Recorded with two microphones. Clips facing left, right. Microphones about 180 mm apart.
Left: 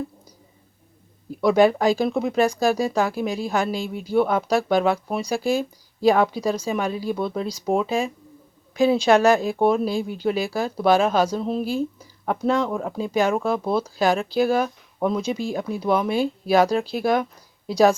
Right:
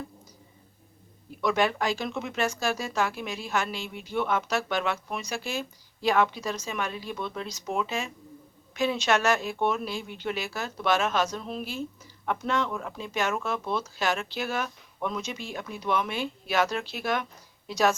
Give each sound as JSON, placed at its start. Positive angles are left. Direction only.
{"t": 1.4, "sound": "a woman's voice", "side_deg": 35}